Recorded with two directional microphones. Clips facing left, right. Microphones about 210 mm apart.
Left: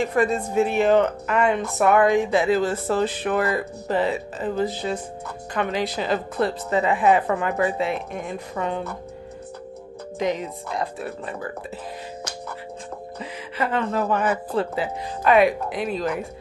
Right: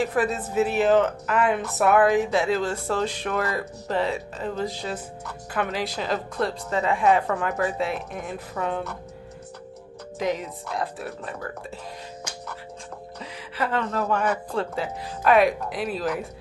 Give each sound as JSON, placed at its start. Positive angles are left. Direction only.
{"t": 0.0, "sound": "speech", "side_deg": -5}
{"t": 10.1, "sound": "speech", "side_deg": 0}
{"t": 13.2, "sound": "speech", "side_deg": 0}